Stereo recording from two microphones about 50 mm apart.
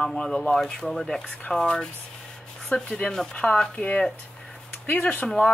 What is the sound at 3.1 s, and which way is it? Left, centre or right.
Speech, centre.